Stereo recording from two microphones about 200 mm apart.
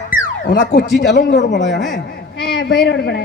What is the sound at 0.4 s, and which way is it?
A man's voice, 55° left (ahead or behind).